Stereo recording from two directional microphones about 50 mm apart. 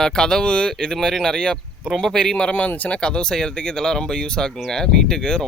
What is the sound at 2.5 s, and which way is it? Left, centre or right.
Speech, left.